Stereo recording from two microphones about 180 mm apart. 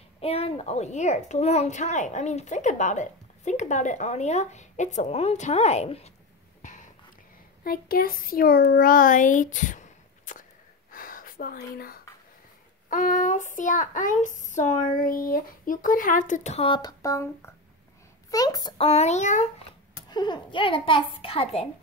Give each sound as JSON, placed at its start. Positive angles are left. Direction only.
{"t": 0.2, "sound": "a woman's voice", "side_deg": 35}
{"t": 6.6, "sound": "a sound", "side_deg": 45}
{"t": 7.6, "sound": "a child's voice", "side_deg": 55}
{"t": 10.9, "sound": "gasp", "side_deg": 50}
{"t": 12.9, "sound": "a sound", "side_deg": 45}
{"t": 18.3, "sound": "a child's voice", "side_deg": 20}
{"t": 18.8, "sound": "a woman's voice", "side_deg": 35}
{"t": 20.1, "sound": "a child's voice", "side_deg": 25}